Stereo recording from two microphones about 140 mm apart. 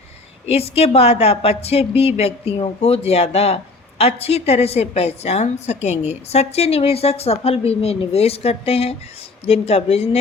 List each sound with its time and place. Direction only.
0.4 s a woman's voice: 45° left (ahead or behind)